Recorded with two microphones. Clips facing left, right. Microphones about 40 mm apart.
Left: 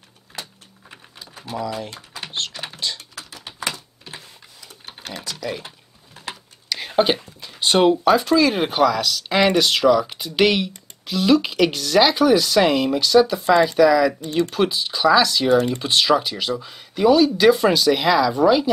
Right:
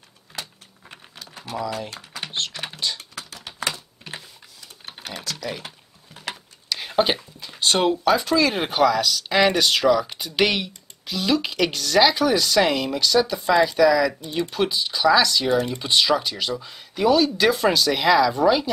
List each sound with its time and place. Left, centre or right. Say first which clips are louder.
1.4 s speech: left 1 dB; centre
2.9 s typing: even; centre
3.3 s typing: left 1 dB; left
3.7 s typing: right 1 dB; right
4.9 s typing: even; centre
6.7 s speech: left 2 dB; centre